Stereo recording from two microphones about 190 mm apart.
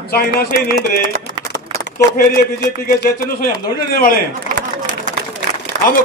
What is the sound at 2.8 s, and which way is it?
A man's voice, 50° left (ahead or behind).